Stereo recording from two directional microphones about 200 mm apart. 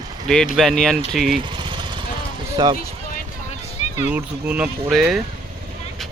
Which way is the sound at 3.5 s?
35° left (ahead or behind).